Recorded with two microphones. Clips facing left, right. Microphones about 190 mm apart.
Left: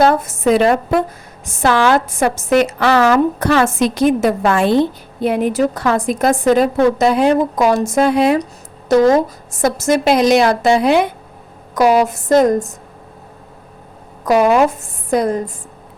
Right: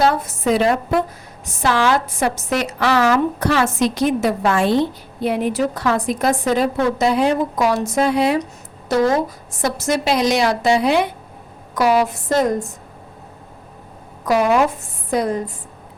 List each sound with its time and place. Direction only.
0.0 s a woman's voice: 50° left (ahead or behind)
9.5 s a woman's voice: 45° left (ahead or behind)
14.3 s a woman's voice: 45° left (ahead or behind)